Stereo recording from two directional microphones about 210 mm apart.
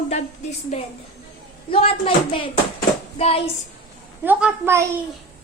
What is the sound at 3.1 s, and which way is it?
Hands, 30° left (ahead or behind).